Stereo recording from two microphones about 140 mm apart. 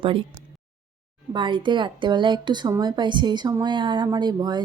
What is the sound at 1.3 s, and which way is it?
Speech, 35° right (ahead or behind).